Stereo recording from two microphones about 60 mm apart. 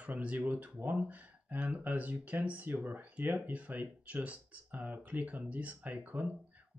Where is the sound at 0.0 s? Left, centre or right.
Right.